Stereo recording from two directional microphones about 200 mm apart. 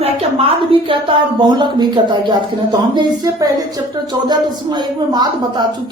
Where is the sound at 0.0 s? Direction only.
25° right (ahead or behind).